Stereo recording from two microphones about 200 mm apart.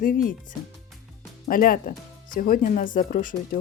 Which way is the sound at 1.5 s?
45° left (ahead or behind).